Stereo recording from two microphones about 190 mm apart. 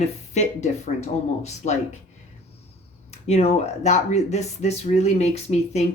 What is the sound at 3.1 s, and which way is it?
Speech, 35° left (ahead or behind).